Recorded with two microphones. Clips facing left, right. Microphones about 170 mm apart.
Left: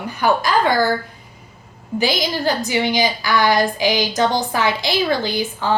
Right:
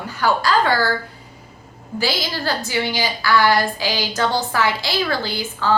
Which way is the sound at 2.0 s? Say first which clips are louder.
Left 3 dB; 20° left (ahead or behind).